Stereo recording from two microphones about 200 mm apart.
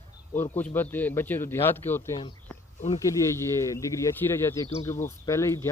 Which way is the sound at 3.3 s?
15° left (ahead or behind).